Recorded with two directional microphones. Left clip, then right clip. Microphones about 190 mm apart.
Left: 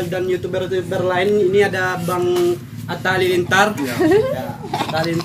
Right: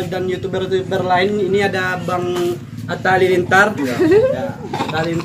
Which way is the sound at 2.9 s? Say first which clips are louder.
Right 3 dB; 10° left (ahead or behind).